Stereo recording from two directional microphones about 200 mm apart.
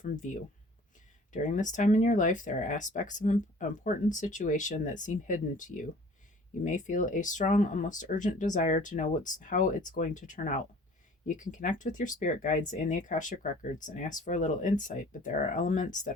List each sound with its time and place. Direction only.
0.0 s speech: 40° left (ahead or behind)